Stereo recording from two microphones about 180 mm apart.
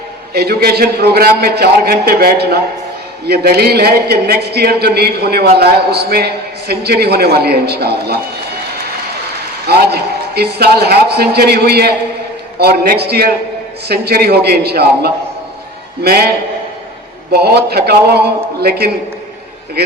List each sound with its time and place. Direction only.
0.3 s a man's voice: 60° right (ahead or behind)
9.6 s a man's voice: 65° right (ahead or behind)
17.3 s a man's voice: 65° right (ahead or behind)